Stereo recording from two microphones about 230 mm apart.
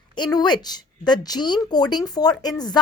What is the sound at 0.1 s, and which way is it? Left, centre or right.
A woman's voice, centre.